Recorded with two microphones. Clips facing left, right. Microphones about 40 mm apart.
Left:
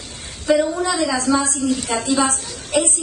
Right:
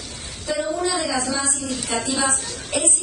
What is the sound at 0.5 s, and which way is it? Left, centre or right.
A woman's voice, left.